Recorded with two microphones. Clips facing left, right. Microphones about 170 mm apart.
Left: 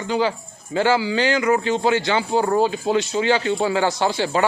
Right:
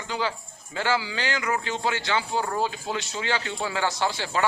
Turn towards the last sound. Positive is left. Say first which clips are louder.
# left 6 dB
turn(degrees=20)  # may be behind; listen again after turning